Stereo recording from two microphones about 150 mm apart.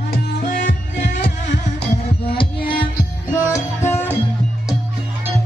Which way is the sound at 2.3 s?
35° left (ahead or behind).